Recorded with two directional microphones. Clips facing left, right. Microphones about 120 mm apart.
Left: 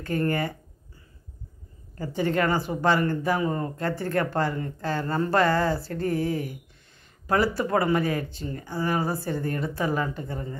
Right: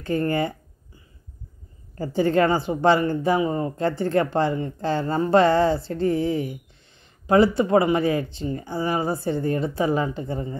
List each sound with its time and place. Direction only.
0.0 s speech: 25° right (ahead or behind)
2.0 s speech: 30° right (ahead or behind)